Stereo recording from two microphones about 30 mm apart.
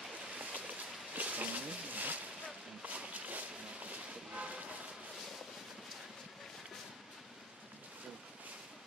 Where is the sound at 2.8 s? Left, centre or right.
Right.